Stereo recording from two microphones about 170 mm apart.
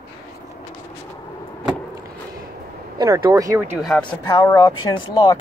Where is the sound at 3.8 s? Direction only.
5° left (ahead or behind).